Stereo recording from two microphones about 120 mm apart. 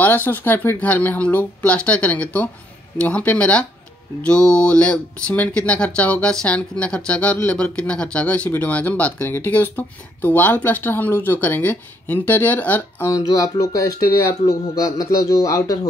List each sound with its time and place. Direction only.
0.0 s speech: 15° left (ahead or behind)
13.1 s speech: 30° left (ahead or behind)